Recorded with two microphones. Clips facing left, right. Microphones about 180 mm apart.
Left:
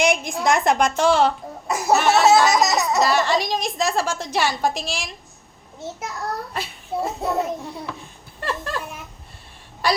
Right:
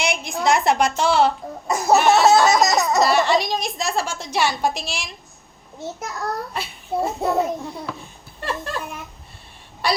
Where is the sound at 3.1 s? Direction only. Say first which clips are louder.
Right 2 dB; 45° left (ahead or behind).